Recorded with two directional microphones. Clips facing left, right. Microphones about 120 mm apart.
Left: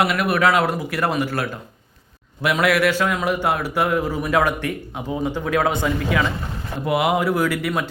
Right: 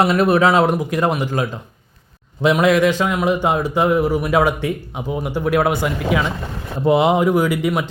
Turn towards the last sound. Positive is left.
turn(degrees=-20)  # may be behind; listen again after turning